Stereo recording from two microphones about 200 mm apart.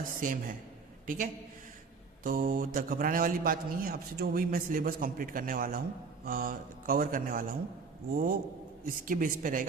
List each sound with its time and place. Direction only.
0.0 s a man's voice: 45° right (ahead or behind)